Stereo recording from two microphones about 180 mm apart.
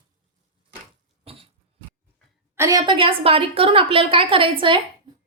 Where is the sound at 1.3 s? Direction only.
30° right (ahead or behind).